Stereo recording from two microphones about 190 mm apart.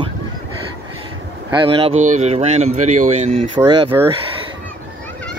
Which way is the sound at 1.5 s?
25° right (ahead or behind).